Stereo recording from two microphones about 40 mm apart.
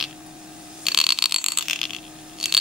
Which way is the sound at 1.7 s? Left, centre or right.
Centre.